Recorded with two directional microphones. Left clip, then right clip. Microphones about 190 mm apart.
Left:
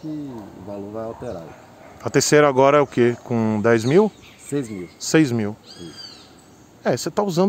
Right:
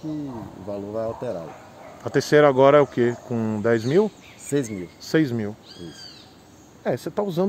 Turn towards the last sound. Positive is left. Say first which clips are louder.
# left 4 dB
turn(degrees=40)  # may be behind; listen again after turning